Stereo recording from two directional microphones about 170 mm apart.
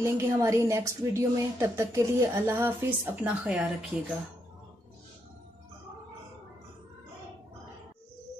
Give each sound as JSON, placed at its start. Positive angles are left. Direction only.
{"t": 0.0, "sound": "a woman's voice", "side_deg": -15}